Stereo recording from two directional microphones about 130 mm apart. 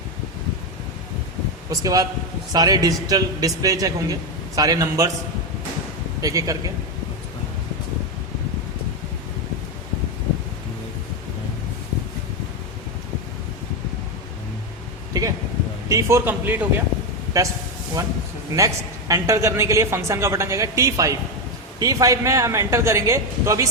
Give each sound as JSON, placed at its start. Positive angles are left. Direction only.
{"t": 1.7, "sound": "a man's voice", "side_deg": -30}
{"t": 6.2, "sound": "a man's voice", "side_deg": -25}
{"t": 15.9, "sound": "a man's voice", "side_deg": -25}
{"t": 18.5, "sound": "a man's voice", "side_deg": -25}